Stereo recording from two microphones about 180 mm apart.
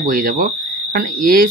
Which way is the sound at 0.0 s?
55° right (ahead or behind).